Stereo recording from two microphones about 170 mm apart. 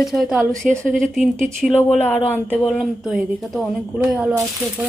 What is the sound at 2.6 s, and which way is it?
Speech, 5° right (ahead or behind).